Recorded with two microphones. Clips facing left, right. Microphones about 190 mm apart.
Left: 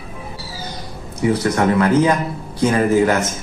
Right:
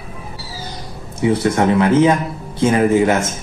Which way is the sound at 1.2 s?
25° right (ahead or behind).